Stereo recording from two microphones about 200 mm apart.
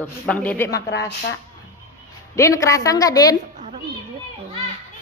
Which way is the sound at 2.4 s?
15° left (ahead or behind).